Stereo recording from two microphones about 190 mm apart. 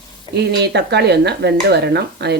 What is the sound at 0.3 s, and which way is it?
Speech, 60° right (ahead or behind).